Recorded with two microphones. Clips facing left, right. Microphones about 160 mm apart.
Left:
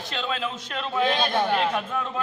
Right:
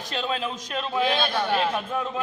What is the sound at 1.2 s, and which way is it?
Speech, 20° left (ahead or behind).